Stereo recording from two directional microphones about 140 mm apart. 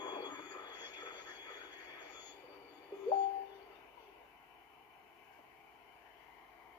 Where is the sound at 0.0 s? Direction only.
30° left (ahead or behind).